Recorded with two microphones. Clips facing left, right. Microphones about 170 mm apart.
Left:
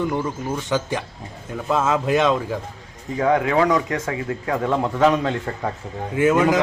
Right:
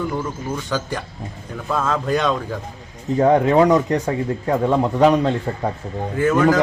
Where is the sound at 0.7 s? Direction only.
15° left (ahead or behind).